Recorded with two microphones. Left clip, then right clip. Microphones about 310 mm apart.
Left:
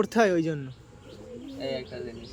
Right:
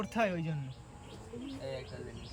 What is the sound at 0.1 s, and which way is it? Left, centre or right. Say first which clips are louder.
Speech: left 10 dB; centre.